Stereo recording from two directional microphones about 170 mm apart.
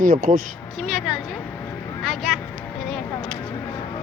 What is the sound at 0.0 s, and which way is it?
Speech, 55° right (ahead or behind).